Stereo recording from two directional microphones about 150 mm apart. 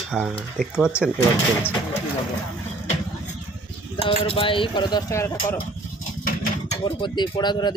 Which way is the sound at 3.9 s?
40° left (ahead or behind).